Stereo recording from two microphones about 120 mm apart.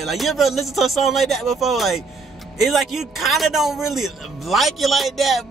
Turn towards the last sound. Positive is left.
turn(degrees=0)  # may be behind; listen again after turning